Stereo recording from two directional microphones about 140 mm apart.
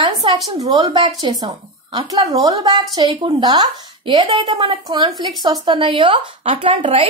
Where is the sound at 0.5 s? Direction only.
35° right (ahead or behind).